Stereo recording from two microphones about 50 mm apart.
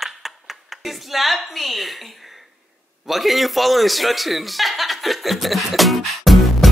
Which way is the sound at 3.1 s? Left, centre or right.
Centre.